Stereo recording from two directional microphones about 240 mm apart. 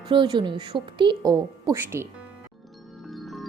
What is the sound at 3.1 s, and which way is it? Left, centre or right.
Music, centre.